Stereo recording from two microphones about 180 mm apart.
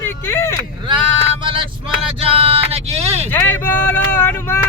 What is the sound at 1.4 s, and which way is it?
Vehicle, 30° right (ahead or behind).